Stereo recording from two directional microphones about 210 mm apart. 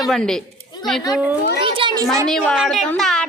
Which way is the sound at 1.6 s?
25° right (ahead or behind).